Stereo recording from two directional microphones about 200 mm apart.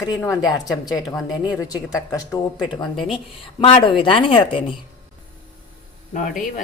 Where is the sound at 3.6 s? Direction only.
25° left (ahead or behind).